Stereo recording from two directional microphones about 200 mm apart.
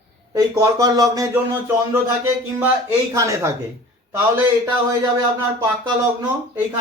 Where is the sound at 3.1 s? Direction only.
15° right (ahead or behind).